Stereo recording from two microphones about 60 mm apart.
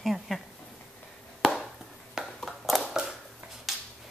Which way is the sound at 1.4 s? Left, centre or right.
Centre.